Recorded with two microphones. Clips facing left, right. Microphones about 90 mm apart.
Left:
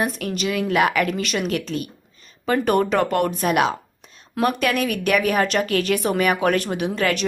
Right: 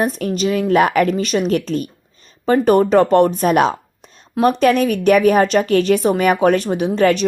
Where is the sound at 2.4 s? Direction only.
25° right (ahead or behind).